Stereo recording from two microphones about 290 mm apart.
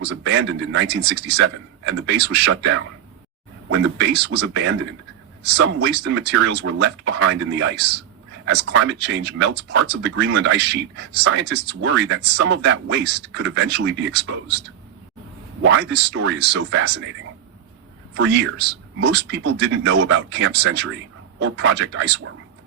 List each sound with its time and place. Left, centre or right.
0.3 s speech: right
15.6 s speech: right
18.2 s speech: right